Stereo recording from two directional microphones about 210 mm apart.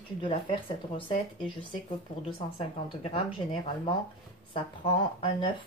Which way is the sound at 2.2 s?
25° left (ahead or behind).